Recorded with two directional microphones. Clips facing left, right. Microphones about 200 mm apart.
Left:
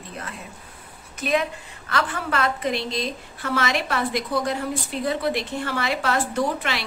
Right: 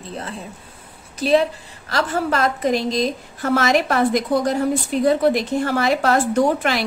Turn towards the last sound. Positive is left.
turn(degrees=-45)  # may be behind; listen again after turning